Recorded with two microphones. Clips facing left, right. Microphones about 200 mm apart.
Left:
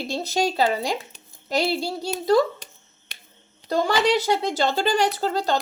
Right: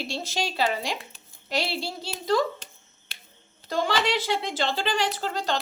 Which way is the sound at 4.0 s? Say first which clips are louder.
Left 6 dB; 40° left (ahead or behind).